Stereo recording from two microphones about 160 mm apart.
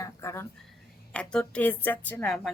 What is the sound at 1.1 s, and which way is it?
Speech, 5° left (ahead or behind).